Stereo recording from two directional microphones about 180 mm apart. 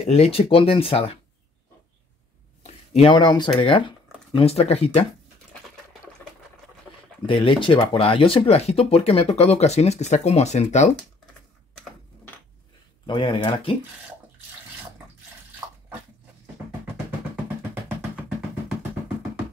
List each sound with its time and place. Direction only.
0.0 s speech: 35° left (ahead or behind)
2.6 s speech: 35° left (ahead or behind)
7.2 s speech: 30° left (ahead or behind)
13.0 s speech: 25° left (ahead or behind)